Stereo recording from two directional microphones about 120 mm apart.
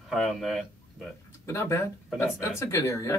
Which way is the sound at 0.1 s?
Centre (ahead or behind).